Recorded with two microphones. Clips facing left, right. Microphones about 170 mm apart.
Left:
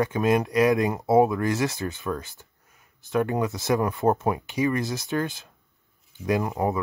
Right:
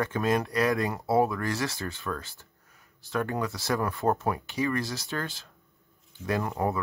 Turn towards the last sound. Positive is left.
turn(degrees=15)  # may be behind; listen again after turning